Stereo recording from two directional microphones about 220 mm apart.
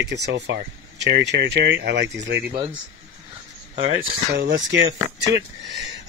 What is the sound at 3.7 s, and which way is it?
Speech, 25° right (ahead or behind).